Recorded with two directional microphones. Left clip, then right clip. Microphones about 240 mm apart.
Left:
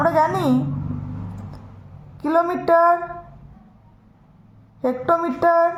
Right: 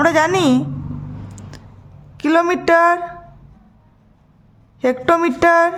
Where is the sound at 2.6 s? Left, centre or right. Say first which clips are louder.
Right 1 dB; right.